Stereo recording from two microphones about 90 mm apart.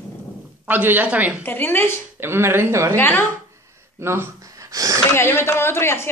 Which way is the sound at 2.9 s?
20° left (ahead or behind).